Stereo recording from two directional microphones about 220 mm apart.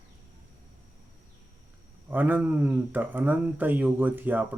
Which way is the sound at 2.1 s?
10° right (ahead or behind).